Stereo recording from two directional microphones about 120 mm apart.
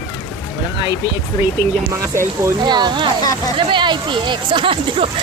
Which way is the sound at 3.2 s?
30° left (ahead or behind).